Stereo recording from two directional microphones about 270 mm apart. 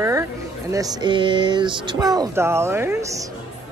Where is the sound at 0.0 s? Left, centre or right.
Centre.